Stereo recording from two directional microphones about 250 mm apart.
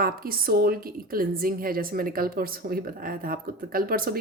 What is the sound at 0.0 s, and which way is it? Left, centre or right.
A woman's voice, right.